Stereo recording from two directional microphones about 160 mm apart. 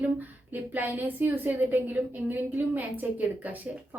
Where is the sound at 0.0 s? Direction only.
10° right (ahead or behind).